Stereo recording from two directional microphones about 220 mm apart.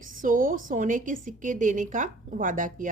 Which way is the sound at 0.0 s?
40° right (ahead or behind).